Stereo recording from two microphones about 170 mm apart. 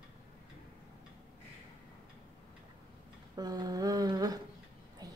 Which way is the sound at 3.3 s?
25° right (ahead or behind).